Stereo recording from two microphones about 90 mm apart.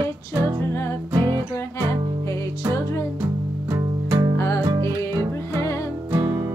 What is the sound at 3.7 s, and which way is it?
Music, 40° right (ahead or behind).